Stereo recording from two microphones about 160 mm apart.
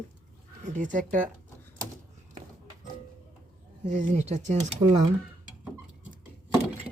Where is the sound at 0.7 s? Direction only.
55° right (ahead or behind).